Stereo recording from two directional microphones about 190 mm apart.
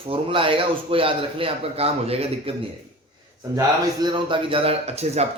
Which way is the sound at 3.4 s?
15° right (ahead or behind).